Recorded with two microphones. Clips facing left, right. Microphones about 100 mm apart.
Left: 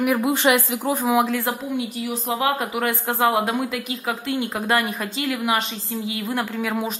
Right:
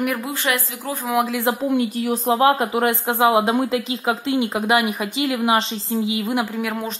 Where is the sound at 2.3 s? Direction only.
25° right (ahead or behind).